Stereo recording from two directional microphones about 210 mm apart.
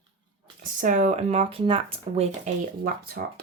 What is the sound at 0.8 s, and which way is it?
Speech, 35° right (ahead or behind).